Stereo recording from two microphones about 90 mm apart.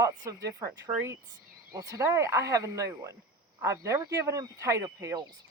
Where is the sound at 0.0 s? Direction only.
40° right (ahead or behind).